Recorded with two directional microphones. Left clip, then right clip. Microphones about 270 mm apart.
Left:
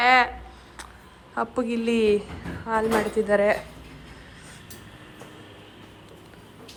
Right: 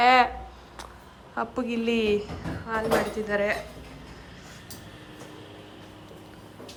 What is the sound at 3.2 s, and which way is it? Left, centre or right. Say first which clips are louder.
Speech: left 5 dB; centre.